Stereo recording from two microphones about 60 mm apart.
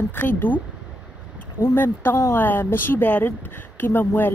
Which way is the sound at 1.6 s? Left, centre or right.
Left.